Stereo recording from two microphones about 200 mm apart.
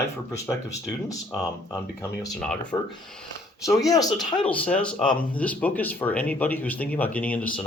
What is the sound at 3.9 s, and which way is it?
Speech, 20° left (ahead or behind).